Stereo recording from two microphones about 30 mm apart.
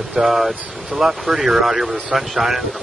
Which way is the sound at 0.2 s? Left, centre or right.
Centre.